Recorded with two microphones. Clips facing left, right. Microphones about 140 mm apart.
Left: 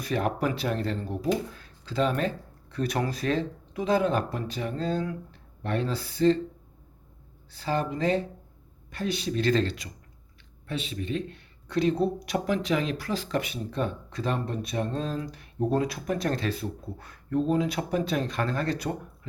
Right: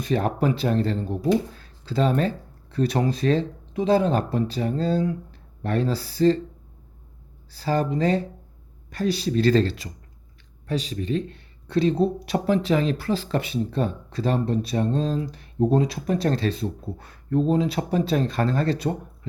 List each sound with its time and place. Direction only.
0.0 s speech: 30° right (ahead or behind)
7.5 s speech: 35° right (ahead or behind)